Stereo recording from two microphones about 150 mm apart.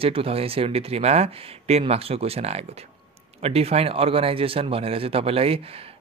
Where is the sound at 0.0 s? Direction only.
40° right (ahead or behind).